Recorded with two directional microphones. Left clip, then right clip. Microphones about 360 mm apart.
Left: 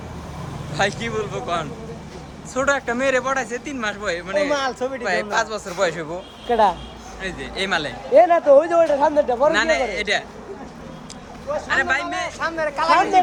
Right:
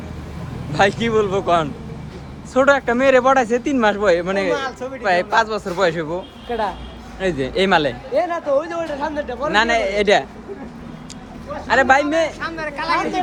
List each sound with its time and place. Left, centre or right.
0.8 s speech: centre
4.4 s a man's voice: left
5.0 s speech: centre
6.5 s a man's voice: left
7.2 s speech: centre
8.1 s speech: centre
9.5 s speech: centre
11.7 s speech: centre
12.4 s speech: centre